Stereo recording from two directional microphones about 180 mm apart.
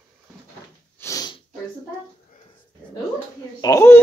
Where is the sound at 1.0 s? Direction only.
20° left (ahead or behind).